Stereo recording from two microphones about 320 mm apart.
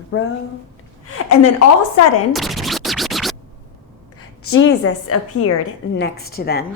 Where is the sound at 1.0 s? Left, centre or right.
Left.